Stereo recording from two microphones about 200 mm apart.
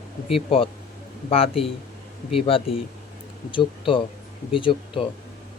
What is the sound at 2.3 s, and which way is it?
Speech, 25° left (ahead or behind).